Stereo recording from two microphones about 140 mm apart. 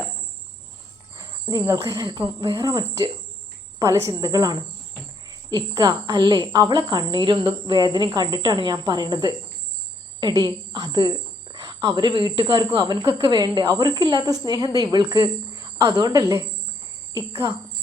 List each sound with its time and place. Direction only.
1.1 s speech: 25° right (ahead or behind)
2.2 s cricket: 40° right (ahead or behind)
2.6 s a woman's voice: 20° right (ahead or behind)
6.5 s cricket: 30° right (ahead or behind)
7.3 s a woman's voice: 30° right (ahead or behind)